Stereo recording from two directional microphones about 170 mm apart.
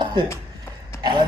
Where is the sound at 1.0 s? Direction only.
25° right (ahead or behind).